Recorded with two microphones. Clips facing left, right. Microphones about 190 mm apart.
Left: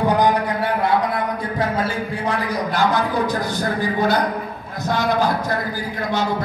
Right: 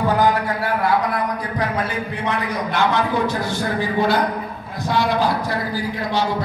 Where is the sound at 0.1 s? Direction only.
15° left (ahead or behind); by 3.3 s 35° left (ahead or behind).